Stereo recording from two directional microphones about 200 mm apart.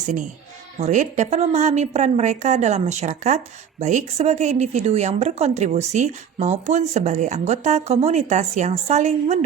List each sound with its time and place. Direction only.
0.0 s a woman's voice: 40° right (ahead or behind)